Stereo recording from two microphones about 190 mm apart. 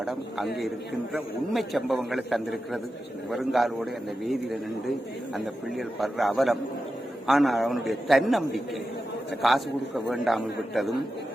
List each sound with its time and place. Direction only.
0.0 s a man's voice: centre (ahead or behind)
5.3 s a man's voice: centre (ahead or behind)